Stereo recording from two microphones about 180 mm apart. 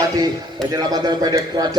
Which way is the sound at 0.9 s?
20° right (ahead or behind).